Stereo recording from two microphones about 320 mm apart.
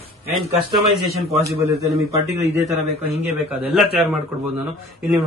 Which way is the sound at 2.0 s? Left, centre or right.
Centre.